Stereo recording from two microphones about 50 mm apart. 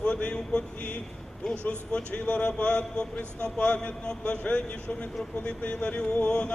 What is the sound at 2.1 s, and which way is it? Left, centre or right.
A man's voice, left.